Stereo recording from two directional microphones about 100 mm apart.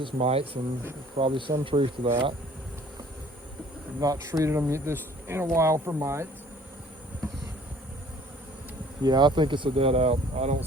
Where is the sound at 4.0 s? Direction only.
35° right (ahead or behind).